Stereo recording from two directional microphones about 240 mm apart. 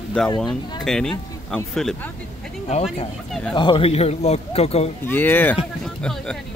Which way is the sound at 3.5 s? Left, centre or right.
Centre.